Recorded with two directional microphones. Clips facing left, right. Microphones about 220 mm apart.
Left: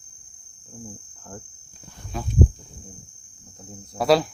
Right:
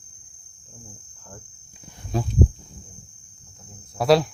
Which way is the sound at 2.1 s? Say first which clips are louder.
Right 6 dB; 35° right (ahead or behind).